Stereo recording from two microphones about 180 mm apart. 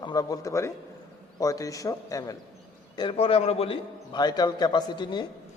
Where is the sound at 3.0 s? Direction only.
30° left (ahead or behind).